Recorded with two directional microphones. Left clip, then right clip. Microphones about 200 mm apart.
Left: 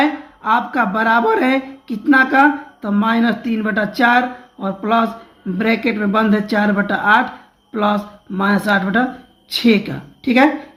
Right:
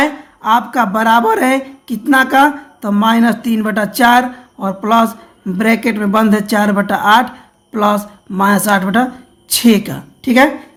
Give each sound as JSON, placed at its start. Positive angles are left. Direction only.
{"t": 0.0, "sound": "speech", "side_deg": -30}